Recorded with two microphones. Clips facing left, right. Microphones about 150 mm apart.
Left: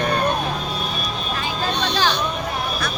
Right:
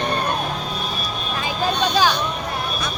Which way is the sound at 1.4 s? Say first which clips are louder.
Right 4 dB; 10° right (ahead or behind).